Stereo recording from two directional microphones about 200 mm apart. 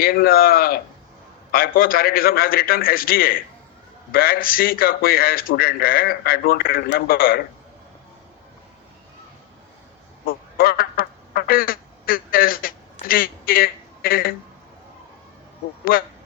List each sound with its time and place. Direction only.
0.0 s speech: 50° left (ahead or behind)
10.2 s a sound: 50° left (ahead or behind)
15.8 s speech: 45° left (ahead or behind)